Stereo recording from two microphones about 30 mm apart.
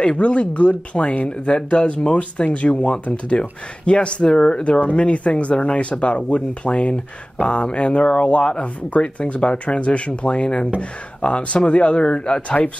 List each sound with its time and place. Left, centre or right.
0.2 s speech: left